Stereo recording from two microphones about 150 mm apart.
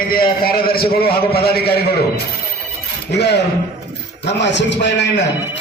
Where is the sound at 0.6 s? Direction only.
90° left.